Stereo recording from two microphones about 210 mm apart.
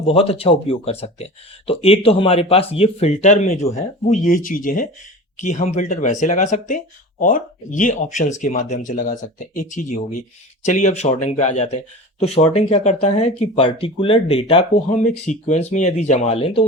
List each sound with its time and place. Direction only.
0.1 s speech: 25° left (ahead or behind)